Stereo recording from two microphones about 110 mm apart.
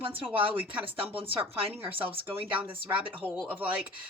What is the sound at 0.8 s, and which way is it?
Speech, 55° right (ahead or behind).